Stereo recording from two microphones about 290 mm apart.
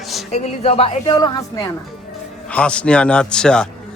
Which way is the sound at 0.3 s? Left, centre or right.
Left.